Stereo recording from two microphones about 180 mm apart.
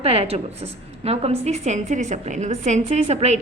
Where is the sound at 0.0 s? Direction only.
35° right (ahead or behind).